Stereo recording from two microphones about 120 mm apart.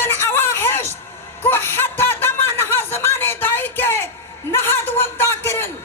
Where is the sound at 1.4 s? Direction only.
20° left (ahead or behind).